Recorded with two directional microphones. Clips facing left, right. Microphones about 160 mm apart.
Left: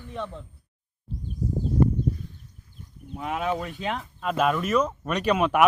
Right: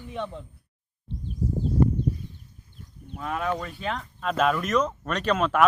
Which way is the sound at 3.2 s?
15° left (ahead or behind).